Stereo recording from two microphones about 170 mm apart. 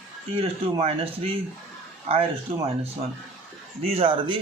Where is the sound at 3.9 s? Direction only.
30° right (ahead or behind).